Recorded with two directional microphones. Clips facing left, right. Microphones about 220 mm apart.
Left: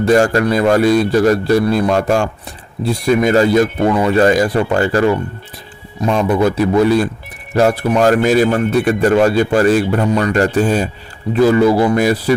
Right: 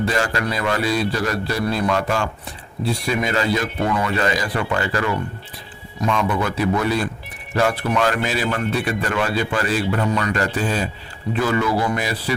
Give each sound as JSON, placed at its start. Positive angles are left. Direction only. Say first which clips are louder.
{"t": 0.0, "sound": "speech", "louder": "left 10 dB", "side_deg": 45}